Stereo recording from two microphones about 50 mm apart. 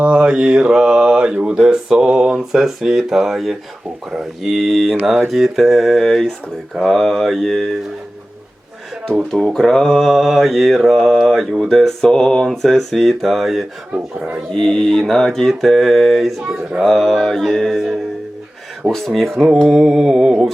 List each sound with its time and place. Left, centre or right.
0.0 s mantra: centre
9.3 s mantra: centre
14.5 s mantra: centre
17.2 s music: centre
17.7 s mantra: centre
19.6 s mantra: centre